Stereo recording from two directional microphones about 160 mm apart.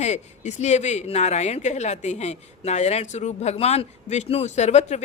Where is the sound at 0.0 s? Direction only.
45° left (ahead or behind).